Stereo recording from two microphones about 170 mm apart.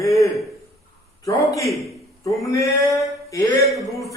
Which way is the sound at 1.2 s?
20° left (ahead or behind).